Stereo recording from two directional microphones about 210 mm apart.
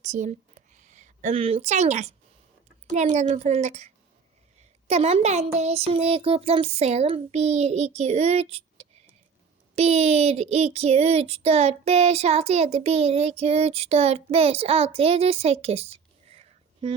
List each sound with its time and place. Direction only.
0.0 s a sound: 35° right (ahead or behind)
2.9 s speech: 35° right (ahead or behind)
9.7 s child singing: 30° right (ahead or behind)